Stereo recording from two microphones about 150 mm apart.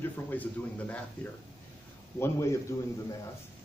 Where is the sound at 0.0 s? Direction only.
15° left (ahead or behind).